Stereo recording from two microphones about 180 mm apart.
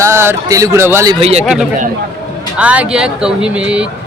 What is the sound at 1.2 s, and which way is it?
Speech, 35° right (ahead or behind).